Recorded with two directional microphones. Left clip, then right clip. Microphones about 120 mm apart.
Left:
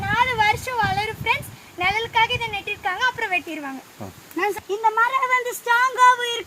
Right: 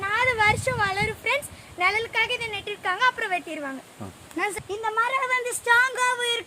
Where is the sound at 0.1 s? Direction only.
35° right (ahead or behind).